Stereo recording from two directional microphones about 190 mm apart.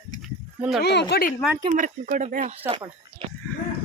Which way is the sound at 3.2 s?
30° right (ahead or behind).